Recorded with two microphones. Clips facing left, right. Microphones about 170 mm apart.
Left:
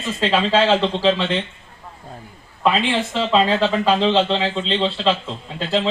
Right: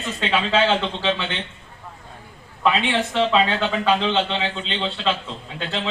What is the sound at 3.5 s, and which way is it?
Speech, 35° left (ahead or behind).